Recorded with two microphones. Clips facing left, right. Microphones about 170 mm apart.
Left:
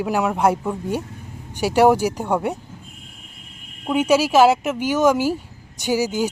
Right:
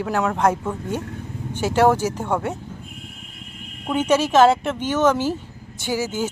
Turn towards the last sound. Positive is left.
turn(degrees=15)  # may be behind; listen again after turning